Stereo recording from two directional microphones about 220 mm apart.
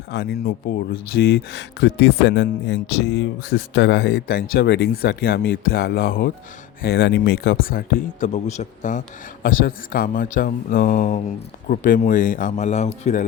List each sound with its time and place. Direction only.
0.1 s speech: 50° left (ahead or behind); by 13.2 s 30° left (ahead or behind)